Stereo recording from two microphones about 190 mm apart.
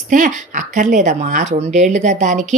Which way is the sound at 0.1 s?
40° right (ahead or behind).